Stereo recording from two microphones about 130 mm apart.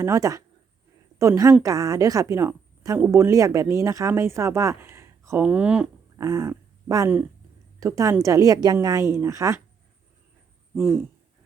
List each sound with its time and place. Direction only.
0.0 s speech: 25° right (ahead or behind); by 5.9 s 10° right (ahead or behind)
6.1 s speech: 25° right (ahead or behind)
10.8 s speech: 20° right (ahead or behind)